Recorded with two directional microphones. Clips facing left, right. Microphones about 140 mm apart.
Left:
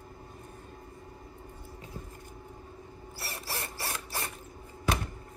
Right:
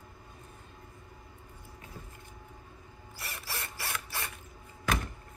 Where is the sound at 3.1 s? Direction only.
40° left (ahead or behind).